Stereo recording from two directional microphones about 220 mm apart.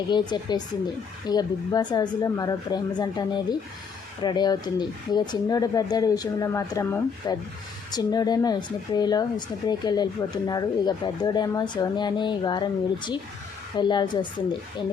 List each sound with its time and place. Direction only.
0.1 s speech: 20° left (ahead or behind)